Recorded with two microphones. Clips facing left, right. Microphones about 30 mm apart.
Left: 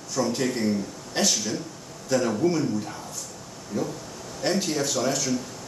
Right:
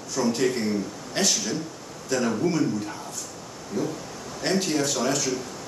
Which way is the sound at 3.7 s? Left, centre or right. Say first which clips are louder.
Right 1 dB; right.